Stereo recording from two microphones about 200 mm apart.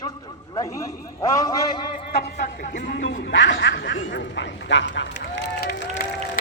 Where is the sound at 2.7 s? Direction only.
55° left (ahead or behind).